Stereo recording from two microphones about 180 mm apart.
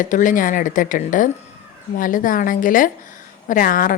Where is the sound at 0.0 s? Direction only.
45° left (ahead or behind).